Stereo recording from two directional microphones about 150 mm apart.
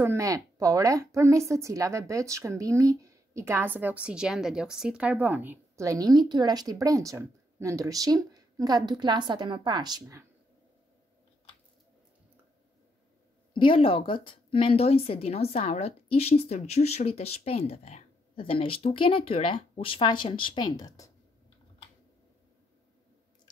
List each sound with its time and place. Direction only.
0.0 s speech: 20° right (ahead or behind)
13.5 s speech: 35° left (ahead or behind)